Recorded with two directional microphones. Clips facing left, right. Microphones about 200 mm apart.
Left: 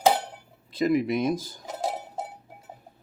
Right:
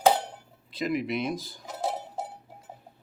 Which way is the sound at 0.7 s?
45° left (ahead or behind).